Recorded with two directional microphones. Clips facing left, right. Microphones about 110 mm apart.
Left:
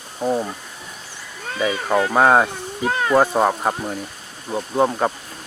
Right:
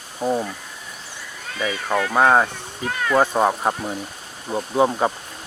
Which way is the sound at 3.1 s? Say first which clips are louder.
Left 1 dB; 5° left (ahead or behind).